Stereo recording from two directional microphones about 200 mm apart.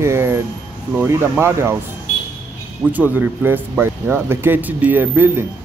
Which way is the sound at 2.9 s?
10° right (ahead or behind).